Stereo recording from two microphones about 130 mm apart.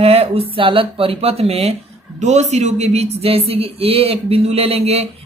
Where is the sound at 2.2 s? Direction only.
60° right (ahead or behind).